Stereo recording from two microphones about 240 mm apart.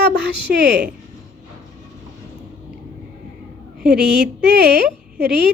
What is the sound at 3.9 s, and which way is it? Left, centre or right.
A woman's voice, right.